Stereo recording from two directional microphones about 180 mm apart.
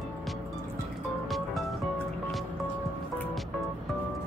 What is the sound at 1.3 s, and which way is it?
Music, centre (ahead or behind).